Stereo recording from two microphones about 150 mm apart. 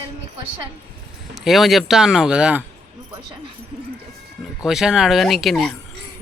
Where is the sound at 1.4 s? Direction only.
Centre (ahead or behind).